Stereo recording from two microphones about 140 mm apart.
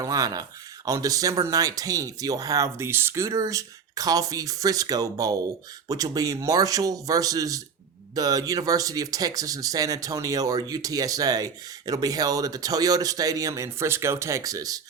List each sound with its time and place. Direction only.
0.0 s speech: 25° right (ahead or behind)